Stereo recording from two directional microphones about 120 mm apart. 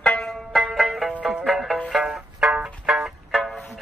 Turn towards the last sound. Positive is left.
turn(degrees=0)  # may be behind; listen again after turning